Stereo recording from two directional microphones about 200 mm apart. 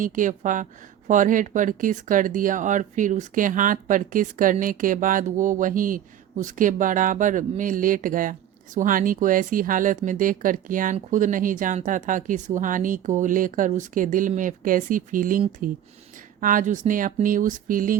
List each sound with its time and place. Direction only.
0.0 s speech: 40° right (ahead or behind)